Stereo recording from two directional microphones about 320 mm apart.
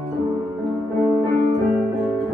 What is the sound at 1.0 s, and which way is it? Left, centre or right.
Music, centre.